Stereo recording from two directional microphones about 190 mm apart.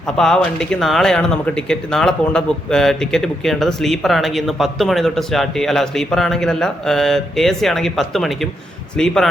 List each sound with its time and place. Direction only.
0.2 s speech: 5° left (ahead or behind)